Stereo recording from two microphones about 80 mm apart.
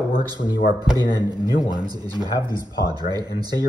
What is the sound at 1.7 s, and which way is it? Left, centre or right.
Speech, right.